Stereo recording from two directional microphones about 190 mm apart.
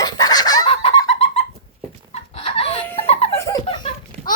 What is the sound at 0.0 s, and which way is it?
Fowl, 20° left (ahead or behind).